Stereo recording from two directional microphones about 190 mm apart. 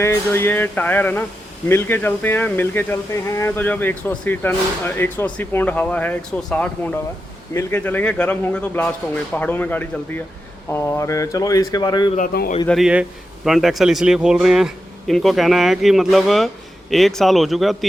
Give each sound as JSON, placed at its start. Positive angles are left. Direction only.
{"t": 0.0, "sound": "speech", "side_deg": 15}
{"t": 12.1, "sound": "a man's voice", "side_deg": 50}
{"t": 12.6, "sound": "a man's voice", "side_deg": 0}